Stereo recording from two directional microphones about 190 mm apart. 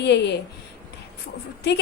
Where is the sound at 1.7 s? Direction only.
65° left (ahead or behind).